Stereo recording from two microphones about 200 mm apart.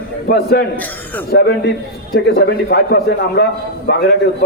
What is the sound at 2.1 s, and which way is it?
A man's voice, 55° left (ahead or behind).